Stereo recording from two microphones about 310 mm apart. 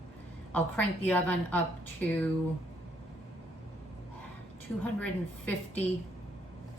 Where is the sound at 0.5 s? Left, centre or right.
Centre.